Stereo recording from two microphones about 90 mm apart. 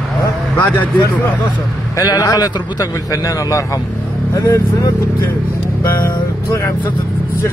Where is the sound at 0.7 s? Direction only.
20° left (ahead or behind).